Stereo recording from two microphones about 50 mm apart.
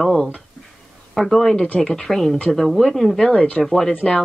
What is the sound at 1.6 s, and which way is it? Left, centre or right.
Speech, centre.